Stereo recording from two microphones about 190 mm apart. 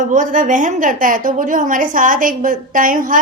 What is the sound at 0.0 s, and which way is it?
A woman's voice, 45° right (ahead or behind).